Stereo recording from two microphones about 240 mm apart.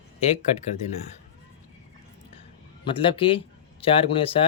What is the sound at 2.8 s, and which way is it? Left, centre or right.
A man's voice, left.